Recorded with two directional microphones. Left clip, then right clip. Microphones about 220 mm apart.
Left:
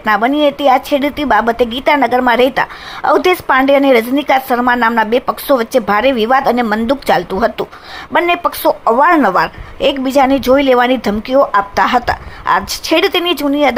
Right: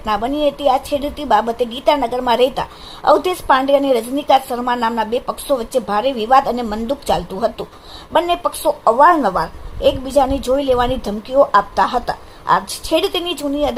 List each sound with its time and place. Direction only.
0.0 s a woman's voice: 20° left (ahead or behind)